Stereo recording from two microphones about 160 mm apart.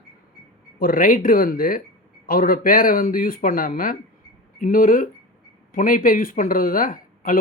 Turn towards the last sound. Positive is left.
turn(degrees=60)  # may be behind; listen again after turning